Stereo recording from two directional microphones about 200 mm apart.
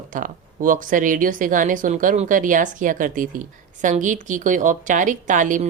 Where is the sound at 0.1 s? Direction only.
40° right (ahead or behind).